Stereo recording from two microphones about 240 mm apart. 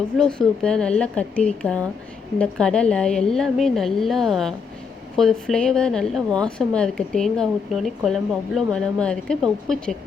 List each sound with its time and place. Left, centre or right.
0.2 s a woman's voice: centre